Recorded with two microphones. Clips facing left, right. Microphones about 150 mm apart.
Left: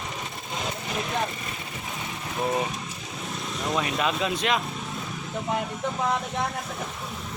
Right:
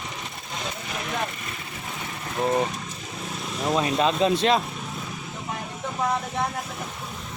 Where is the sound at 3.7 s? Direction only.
30° right (ahead or behind).